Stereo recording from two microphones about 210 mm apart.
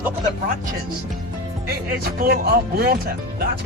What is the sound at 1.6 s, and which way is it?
Speech, 45° right (ahead or behind).